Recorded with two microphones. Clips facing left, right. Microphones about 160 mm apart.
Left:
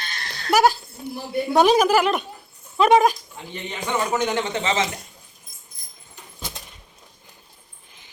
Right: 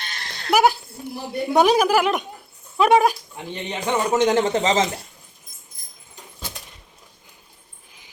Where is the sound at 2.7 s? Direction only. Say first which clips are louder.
Even; 10° right (ahead or behind).